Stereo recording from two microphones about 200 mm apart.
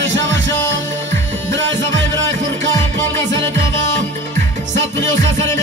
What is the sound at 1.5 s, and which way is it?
Music, 65° right (ahead or behind).